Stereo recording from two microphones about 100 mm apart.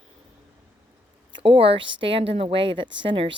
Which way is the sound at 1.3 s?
65° right (ahead or behind).